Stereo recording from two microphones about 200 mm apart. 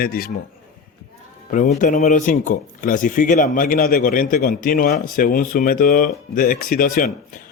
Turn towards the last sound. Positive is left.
turn(degrees=45)  # may be behind; listen again after turning